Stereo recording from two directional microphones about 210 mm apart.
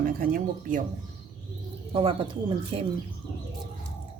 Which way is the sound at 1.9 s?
25° right (ahead or behind).